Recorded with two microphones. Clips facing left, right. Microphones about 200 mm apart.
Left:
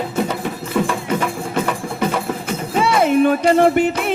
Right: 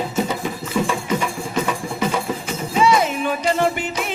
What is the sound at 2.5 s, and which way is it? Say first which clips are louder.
Music: right 2 dB; 55° left (ahead or behind).